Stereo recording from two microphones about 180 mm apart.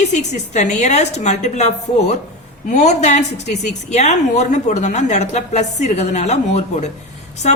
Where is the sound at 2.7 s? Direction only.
40° left (ahead or behind).